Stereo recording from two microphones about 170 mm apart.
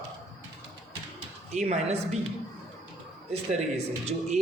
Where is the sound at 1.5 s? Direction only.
40° right (ahead or behind).